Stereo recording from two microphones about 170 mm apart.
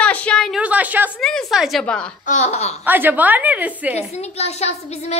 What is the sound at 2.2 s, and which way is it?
Child singing, 45° left (ahead or behind).